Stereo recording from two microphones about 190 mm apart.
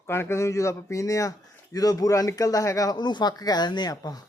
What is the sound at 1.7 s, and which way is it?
Speech, 20° left (ahead or behind).